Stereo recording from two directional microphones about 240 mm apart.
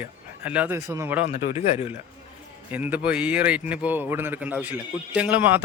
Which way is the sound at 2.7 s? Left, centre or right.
Centre.